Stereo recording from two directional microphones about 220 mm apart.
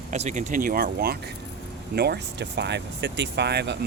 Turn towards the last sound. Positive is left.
turn(degrees=-50)  # may be behind; listen again after turning